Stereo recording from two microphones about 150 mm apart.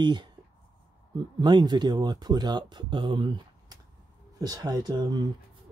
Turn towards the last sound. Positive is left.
turn(degrees=-25)  # may be behind; listen again after turning